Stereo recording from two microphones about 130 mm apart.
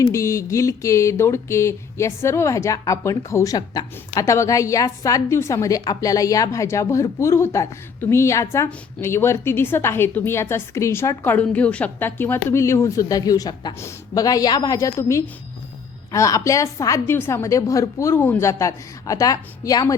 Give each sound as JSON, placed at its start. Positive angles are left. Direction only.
{"t": 0.1, "sound": "speech", "side_deg": 20}